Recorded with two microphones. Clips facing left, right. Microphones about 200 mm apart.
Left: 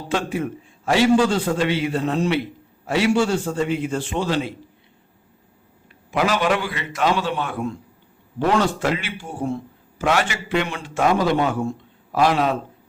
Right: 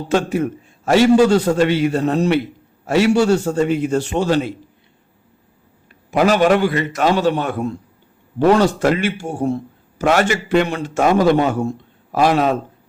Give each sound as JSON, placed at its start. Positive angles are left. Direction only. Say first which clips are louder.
{"t": 0.1, "sound": "a man's voice", "louder": "right 6 dB", "side_deg": -45}
{"t": 6.1, "sound": "a man's voice", "louder": "right 6 dB", "side_deg": -45}